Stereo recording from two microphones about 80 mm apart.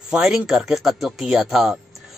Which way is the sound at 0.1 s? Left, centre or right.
Centre.